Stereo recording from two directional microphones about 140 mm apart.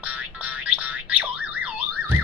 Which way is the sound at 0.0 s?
10° right (ahead or behind).